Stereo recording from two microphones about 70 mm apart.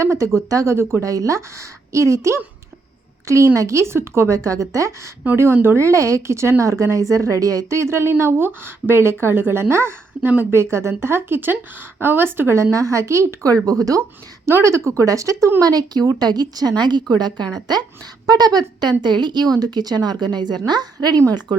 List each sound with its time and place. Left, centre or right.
0.0 s a woman's voice: right
1.0 s a woman's voice: right
10.6 s a woman's voice: right
12.7 s speech: right
14.4 s speech: right
15.6 s a woman's voice: right